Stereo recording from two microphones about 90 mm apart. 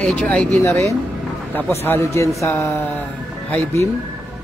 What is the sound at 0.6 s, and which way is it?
A woman's voice, 30° left (ahead or behind).